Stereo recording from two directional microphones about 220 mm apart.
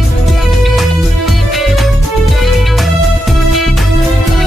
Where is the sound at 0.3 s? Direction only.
Centre (ahead or behind).